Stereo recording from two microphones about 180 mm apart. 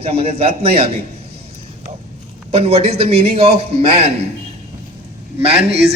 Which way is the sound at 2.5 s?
35° right (ahead or behind).